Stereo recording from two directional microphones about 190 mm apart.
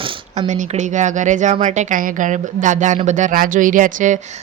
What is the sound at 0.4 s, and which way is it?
Speech, 40° right (ahead or behind).